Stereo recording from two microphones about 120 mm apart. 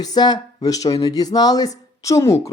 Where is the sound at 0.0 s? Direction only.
35° left (ahead or behind).